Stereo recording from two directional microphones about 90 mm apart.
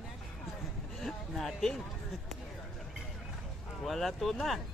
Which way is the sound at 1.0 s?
5° left (ahead or behind).